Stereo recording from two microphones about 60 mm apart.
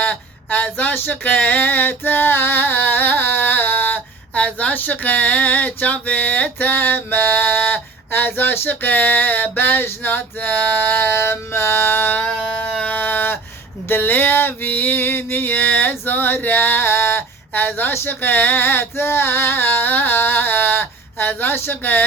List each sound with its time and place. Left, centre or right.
0.0 s speech: left
1.4 s singing: left
12.8 s a sound: left
13.8 s singing: left